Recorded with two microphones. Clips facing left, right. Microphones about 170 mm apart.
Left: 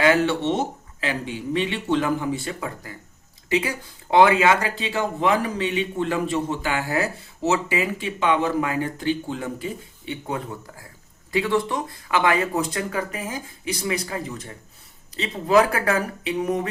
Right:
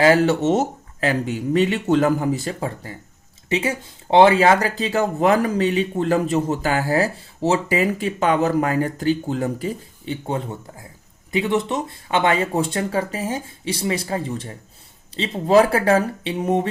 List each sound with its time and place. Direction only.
0.0 s speech: 35° right (ahead or behind)